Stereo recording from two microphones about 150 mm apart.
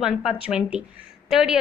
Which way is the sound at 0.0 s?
5° right (ahead or behind).